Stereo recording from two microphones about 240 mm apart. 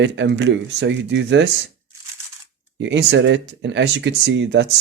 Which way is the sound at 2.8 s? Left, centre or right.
Right.